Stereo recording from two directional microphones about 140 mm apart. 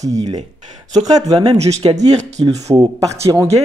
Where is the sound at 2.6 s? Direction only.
25° right (ahead or behind).